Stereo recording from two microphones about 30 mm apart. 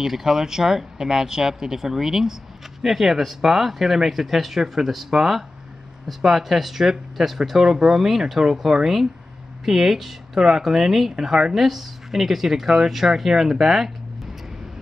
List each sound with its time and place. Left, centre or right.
0.0 s speech: centre
8.4 s speech: right
11.1 s a woman's voice: right
11.5 s speech: centre